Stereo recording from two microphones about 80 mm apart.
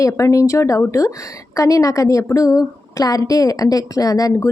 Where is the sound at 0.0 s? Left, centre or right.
Left.